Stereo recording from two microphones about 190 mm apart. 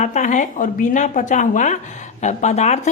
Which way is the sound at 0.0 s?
40° left (ahead or behind).